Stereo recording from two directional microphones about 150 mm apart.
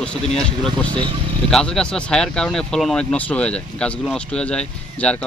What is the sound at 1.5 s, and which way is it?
A man's voice, 5° left (ahead or behind).